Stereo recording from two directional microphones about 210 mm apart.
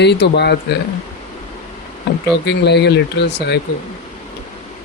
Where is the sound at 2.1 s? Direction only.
50° left (ahead or behind).